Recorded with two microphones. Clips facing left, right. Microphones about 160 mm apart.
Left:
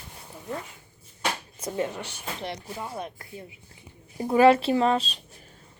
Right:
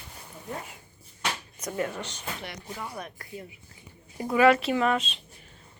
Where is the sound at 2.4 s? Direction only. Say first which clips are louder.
Left 4 dB; 30° left (ahead or behind).